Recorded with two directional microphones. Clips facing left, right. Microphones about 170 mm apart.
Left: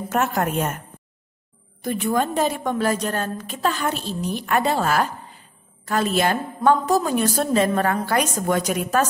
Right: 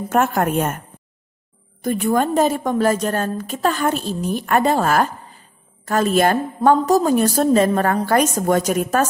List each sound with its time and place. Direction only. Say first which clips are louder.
0.1 s a woman's voice: right 4 dB; 50° right (ahead or behind)
1.8 s a woman's voice: right 4 dB; 45° right (ahead or behind)